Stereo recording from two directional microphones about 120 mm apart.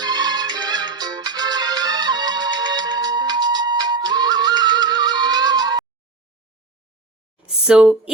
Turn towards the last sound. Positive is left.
turn(degrees=-5)  # may be behind; listen again after turning